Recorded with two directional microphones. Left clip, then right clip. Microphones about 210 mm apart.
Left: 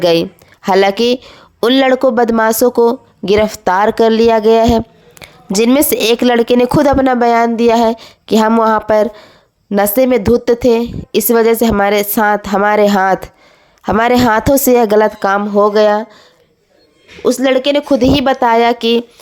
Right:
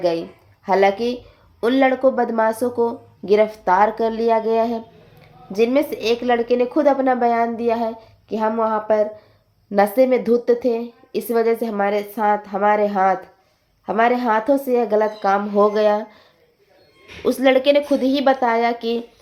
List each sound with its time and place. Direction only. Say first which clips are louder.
0.0 s speech: left 9 dB; 45° left (ahead or behind); by 16.2 s 30° left (ahead or behind)
17.2 s a woman's voice: left 4 dB; 30° left (ahead or behind)